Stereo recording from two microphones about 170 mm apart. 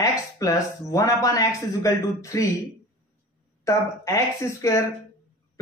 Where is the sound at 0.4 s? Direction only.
20° left (ahead or behind).